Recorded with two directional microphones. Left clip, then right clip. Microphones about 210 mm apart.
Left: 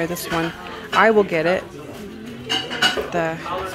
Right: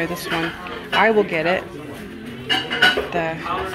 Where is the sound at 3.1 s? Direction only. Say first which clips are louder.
Left 1 dB; 20° left (ahead or behind).